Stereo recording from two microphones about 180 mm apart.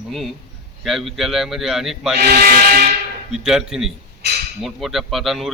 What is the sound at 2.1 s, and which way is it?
Speech, 60° right (ahead or behind).